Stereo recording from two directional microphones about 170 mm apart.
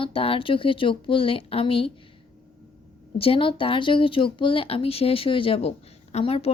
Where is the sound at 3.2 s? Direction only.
30° left (ahead or behind).